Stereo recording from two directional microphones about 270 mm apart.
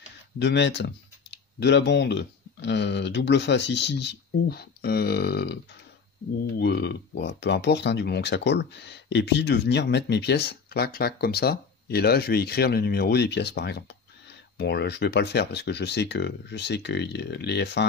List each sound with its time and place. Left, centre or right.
0.4 s speech: left
6.6 s speech: left